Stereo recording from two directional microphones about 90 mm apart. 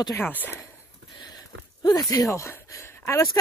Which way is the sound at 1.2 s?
50° left (ahead or behind).